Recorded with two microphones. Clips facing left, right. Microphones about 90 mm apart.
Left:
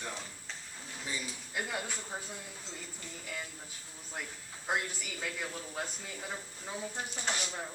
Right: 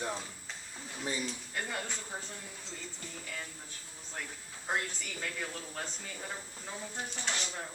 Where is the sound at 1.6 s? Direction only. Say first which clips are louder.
Left 2 dB; 5° left (ahead or behind).